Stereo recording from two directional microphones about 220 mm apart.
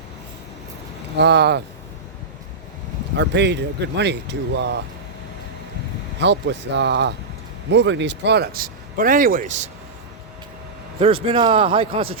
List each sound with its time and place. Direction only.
1.1 s speech: 50° right (ahead or behind)
3.2 s speech: 50° right (ahead or behind)
6.1 s speech: 50° right (ahead or behind); by 9.6 s 35° right (ahead or behind)
11.0 s a man's voice: 25° right (ahead or behind)